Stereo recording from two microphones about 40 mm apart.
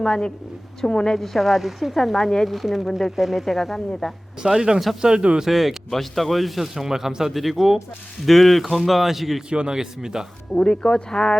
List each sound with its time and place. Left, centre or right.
0.0 s a woman's voice: centre
2.1 s a woman's voice: centre
2.5 s speech: centre
4.4 s a man's voice: centre
5.5 s speech: centre
9.5 s speech: right
10.5 s speech: left